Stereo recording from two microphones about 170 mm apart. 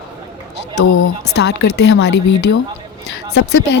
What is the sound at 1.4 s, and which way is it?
Speech, 85° left.